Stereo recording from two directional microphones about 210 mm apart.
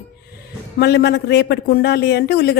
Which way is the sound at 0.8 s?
50° left (ahead or behind).